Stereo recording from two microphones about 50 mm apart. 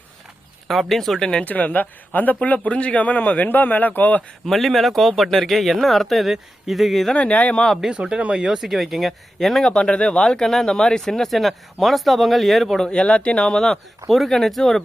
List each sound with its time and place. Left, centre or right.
0.7 s speech: centre
1.4 s a man's voice: left
4.4 s speech: centre
7.1 s speech: left
7.9 s speech: centre
8.5 s speech: centre
9.6 s speech: centre
12.8 s speech: centre